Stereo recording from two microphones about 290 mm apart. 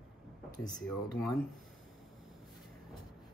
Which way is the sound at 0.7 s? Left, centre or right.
Centre.